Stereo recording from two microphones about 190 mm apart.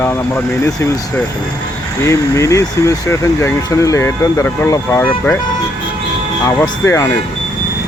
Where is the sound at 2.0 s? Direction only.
15° left (ahead or behind).